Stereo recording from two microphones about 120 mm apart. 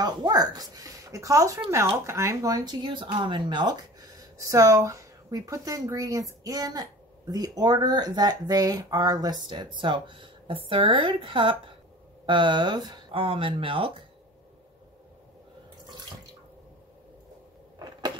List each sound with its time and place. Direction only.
0.0 s speech: 35° right (ahead or behind)